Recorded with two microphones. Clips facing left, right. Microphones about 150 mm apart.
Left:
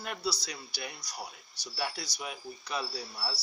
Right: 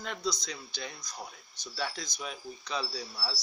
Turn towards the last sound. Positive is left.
turn(degrees=10)  # may be behind; listen again after turning